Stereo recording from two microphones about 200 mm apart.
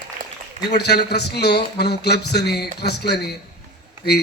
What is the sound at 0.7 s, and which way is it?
A man's voice, 55° left (ahead or behind).